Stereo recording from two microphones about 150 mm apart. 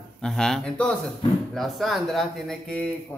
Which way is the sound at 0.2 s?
5° left (ahead or behind).